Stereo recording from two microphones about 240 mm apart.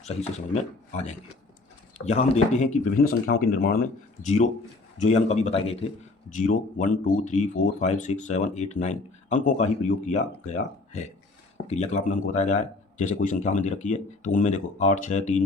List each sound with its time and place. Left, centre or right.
0.0 s speech: left